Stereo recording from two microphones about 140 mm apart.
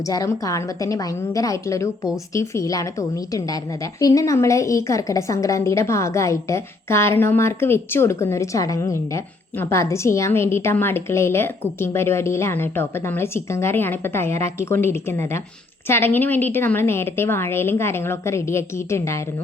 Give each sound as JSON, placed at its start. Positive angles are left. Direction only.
{"t": 0.1, "sound": "a woman's voice", "side_deg": 25}
{"t": 4.0, "sound": "a woman's voice", "side_deg": 25}